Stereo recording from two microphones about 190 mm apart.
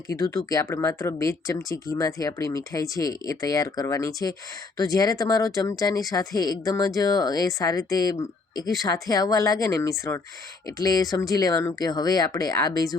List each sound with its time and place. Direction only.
0.3 s speech: 15° left (ahead or behind)